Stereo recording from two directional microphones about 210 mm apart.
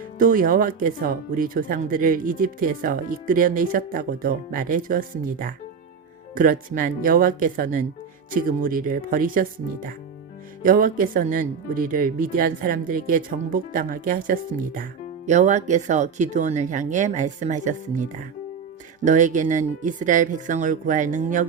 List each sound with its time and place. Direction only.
0.2 s speech: 40° right (ahead or behind)